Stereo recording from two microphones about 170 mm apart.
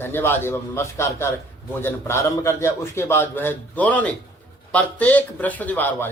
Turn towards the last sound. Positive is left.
turn(degrees=10)  # may be behind; listen again after turning